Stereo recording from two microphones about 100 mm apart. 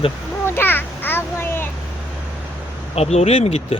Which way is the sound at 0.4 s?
20° left (ahead or behind).